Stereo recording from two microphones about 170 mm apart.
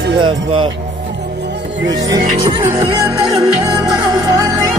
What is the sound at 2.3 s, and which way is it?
Music, 35° right (ahead or behind).